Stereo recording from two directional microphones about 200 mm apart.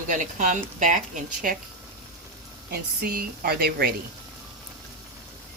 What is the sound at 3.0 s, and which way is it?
Speech, 50° right (ahead or behind).